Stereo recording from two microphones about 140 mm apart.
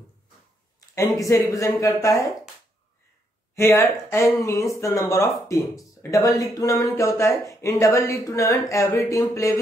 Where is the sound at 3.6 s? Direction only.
20° left (ahead or behind).